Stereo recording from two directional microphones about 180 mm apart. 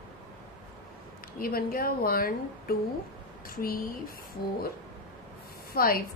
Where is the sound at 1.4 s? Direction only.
55° left (ahead or behind).